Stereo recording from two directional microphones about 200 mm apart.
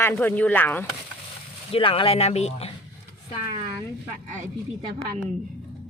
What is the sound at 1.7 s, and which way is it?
Speech, 25° left (ahead or behind).